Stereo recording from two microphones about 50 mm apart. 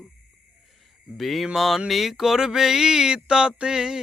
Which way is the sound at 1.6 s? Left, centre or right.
Centre.